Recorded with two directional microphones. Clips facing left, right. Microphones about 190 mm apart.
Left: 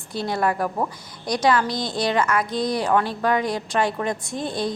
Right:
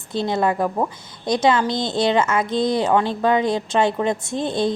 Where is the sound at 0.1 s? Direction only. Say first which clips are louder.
Right 3 dB; 25° right (ahead or behind).